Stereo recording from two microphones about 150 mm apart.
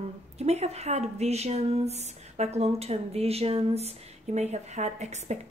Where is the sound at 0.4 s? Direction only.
45° right (ahead or behind).